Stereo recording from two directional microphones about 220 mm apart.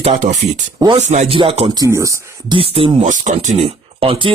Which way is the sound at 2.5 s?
25° right (ahead or behind).